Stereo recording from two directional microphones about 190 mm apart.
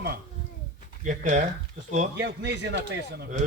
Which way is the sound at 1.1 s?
40° right (ahead or behind).